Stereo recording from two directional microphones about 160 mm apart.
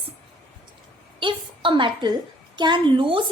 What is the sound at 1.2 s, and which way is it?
A woman's voice, 30° right (ahead or behind).